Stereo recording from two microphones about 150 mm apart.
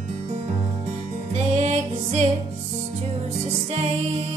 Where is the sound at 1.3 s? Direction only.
45° right (ahead or behind).